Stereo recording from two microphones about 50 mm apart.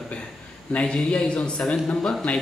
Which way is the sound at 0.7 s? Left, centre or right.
Centre.